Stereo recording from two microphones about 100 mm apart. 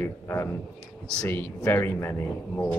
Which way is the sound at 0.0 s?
25° left (ahead or behind).